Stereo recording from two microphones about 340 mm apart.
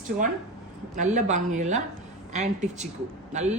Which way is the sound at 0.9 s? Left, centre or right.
Right.